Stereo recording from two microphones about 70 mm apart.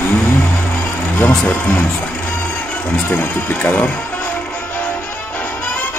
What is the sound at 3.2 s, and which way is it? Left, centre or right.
Speech, left.